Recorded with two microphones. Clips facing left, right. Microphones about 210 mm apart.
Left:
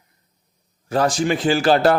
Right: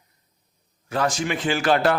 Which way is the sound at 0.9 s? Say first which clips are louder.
Left 5 dB; 35° left (ahead or behind).